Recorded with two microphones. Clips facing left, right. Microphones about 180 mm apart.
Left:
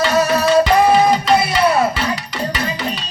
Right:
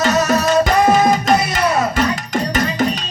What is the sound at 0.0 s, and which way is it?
Music, 45° right (ahead or behind).